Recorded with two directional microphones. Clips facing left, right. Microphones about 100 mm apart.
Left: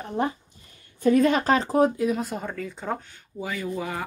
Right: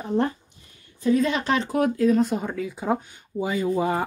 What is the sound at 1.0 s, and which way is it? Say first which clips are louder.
Speech: left 2 dB; 50° left (ahead or behind).